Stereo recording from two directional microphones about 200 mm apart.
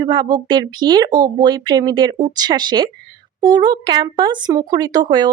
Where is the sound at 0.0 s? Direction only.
20° right (ahead or behind).